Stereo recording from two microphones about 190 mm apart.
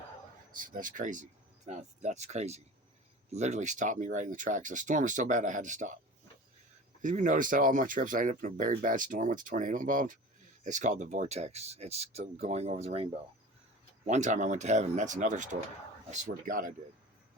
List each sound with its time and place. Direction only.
0.5 s speech: 45° right (ahead or behind)
7.0 s speech: 40° right (ahead or behind)
14.1 s speech: 40° right (ahead or behind)